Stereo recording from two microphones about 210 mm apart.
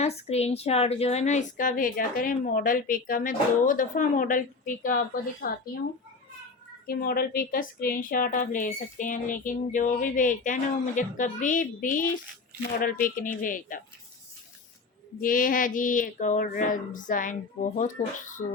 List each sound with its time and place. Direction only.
0.0 s a woman's voice: 30° left (ahead or behind)
6.8 s a woman's voice: 45° left (ahead or behind)
15.2 s a woman's voice: 40° left (ahead or behind)